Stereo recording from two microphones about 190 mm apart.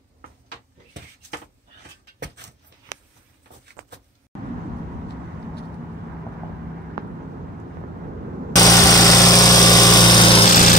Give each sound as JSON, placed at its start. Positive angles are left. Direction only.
{"t": 2.1, "sound": "a sound", "side_deg": -65}
{"t": 8.5, "sound": "engine", "side_deg": 20}
{"t": 10.5, "sound": "lawn mower", "side_deg": 45}